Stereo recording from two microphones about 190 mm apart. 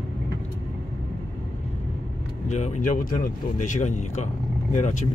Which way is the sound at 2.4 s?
40° left (ahead or behind).